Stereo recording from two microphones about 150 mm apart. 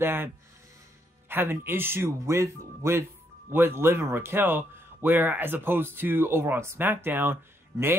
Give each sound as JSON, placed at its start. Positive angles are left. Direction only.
{"t": 0.0, "sound": "speech", "side_deg": -15}
{"t": 1.3, "sound": "speech", "side_deg": -15}